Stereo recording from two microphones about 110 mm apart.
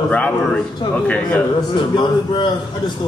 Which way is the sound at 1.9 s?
45° left (ahead or behind).